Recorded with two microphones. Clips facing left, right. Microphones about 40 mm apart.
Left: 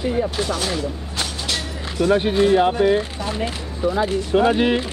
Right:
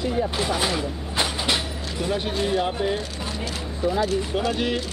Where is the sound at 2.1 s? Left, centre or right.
Left.